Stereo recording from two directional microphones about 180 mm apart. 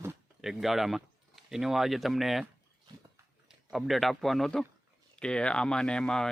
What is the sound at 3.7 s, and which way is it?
Speech, centre (ahead or behind).